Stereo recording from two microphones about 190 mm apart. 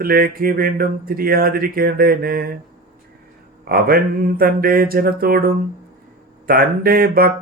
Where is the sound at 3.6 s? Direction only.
55° right (ahead or behind).